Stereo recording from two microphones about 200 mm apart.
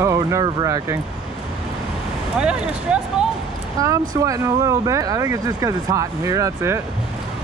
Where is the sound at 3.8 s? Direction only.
15° right (ahead or behind).